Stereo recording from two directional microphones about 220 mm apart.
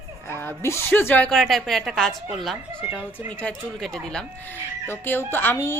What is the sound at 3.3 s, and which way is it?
Speech, 5° left (ahead or behind).